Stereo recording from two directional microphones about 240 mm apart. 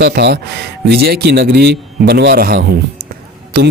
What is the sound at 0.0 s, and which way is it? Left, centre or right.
A man's voice, right.